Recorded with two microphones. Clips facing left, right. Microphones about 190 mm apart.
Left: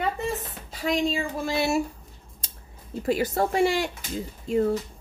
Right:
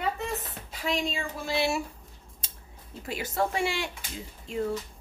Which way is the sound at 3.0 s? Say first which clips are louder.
Left 6 dB; 40° left (ahead or behind).